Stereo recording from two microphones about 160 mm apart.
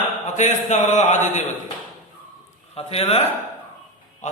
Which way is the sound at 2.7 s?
40° left (ahead or behind).